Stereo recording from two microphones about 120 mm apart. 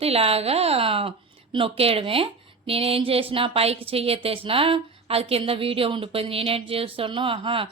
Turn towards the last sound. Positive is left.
turn(degrees=-50)  # may be behind; listen again after turning